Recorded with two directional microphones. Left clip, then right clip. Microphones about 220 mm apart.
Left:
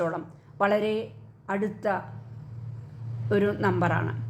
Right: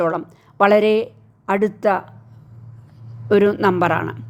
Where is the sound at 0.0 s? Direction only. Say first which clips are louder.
Right 9 dB; 35° right (ahead or behind).